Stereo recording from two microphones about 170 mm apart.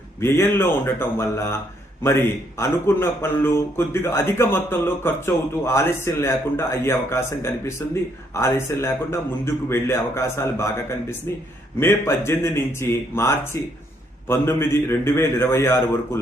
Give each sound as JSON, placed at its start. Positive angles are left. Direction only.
{"t": 0.2, "sound": "speech", "side_deg": 15}